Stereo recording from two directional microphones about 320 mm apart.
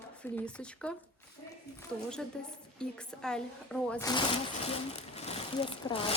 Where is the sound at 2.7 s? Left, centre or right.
Centre.